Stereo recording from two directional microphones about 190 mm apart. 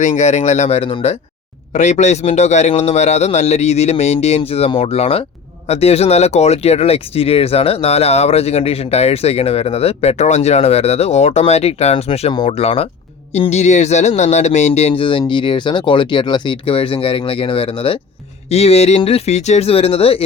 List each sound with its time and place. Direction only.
0.0 s speech: 40° left (ahead or behind)